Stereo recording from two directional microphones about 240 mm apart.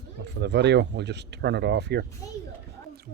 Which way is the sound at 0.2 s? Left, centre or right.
Right.